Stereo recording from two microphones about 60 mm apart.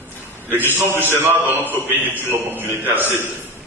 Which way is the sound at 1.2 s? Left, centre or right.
Right.